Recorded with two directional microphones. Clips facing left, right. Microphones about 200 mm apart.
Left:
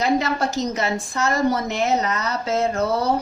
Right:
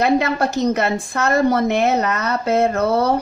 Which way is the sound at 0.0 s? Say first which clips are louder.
Right 4 dB; 60° right (ahead or behind).